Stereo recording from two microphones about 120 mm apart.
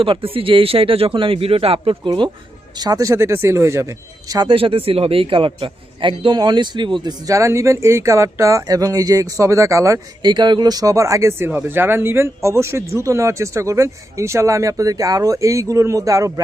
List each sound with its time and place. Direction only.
0.0 s speech: 50° right (ahead or behind)
2.0 s a man's voice: 40° right (ahead or behind)
4.4 s a man's voice: 50° right (ahead or behind); by 10.3 s 25° right (ahead or behind)
10.3 s speech: 40° right (ahead or behind)